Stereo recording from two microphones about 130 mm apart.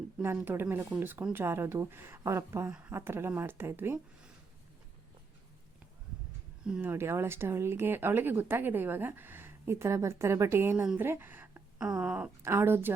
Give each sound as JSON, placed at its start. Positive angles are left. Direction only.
{"t": 0.2, "sound": "speech", "side_deg": -15}
{"t": 6.7, "sound": "speech", "side_deg": -5}
{"t": 6.9, "sound": "a woman's voice", "side_deg": -20}